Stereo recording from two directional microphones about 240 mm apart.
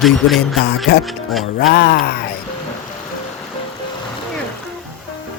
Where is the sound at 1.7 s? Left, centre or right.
Left.